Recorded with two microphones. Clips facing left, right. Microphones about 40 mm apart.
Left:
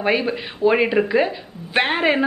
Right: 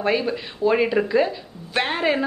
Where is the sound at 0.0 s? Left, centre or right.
Left.